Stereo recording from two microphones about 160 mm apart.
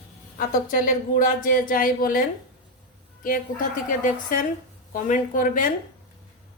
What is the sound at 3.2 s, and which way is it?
Speech, 60° left (ahead or behind).